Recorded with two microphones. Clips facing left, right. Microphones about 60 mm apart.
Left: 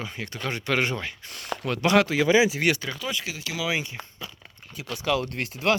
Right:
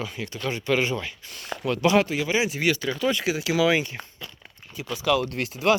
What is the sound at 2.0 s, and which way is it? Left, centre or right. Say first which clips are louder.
Speech: left 4 dB; left.